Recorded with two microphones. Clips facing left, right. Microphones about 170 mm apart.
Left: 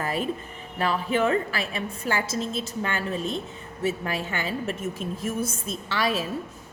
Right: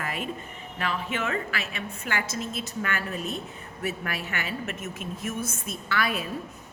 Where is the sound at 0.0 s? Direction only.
35° left (ahead or behind).